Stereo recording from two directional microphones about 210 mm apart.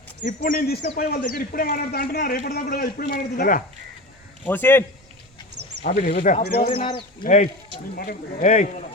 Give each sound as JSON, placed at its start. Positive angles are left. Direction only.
{"t": 0.3, "sound": "a man's voice", "side_deg": 40}
{"t": 4.4, "sound": "a man's voice", "side_deg": 10}
{"t": 5.8, "sound": "speech", "side_deg": 40}
{"t": 6.7, "sound": "speech", "side_deg": 25}
{"t": 7.9, "sound": "speech", "side_deg": 40}